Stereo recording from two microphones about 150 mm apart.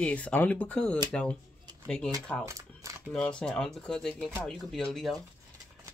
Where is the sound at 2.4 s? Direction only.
20° right (ahead or behind).